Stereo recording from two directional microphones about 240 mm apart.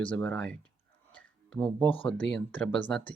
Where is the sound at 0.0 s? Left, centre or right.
Centre.